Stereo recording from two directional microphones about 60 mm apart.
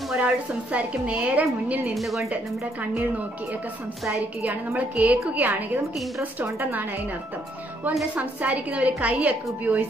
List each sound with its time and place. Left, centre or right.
0.2 s a woman's voice: right
2.0 s a woman's voice: centre
4.4 s a woman's voice: right
8.1 s a woman's voice: right